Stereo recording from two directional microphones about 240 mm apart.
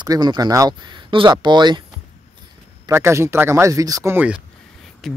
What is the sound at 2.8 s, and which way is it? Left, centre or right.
Speech, centre.